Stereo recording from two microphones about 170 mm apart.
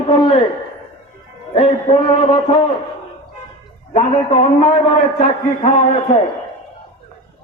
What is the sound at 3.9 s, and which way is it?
A man's voice, 35° left (ahead or behind).